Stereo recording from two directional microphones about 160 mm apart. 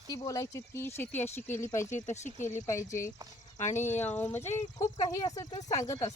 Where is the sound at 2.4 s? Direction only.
15° left (ahead or behind).